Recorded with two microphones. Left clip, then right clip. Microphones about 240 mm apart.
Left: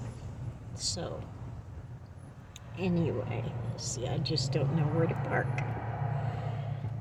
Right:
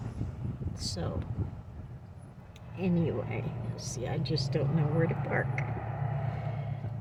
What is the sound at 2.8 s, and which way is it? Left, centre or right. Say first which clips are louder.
Speech: even; centre.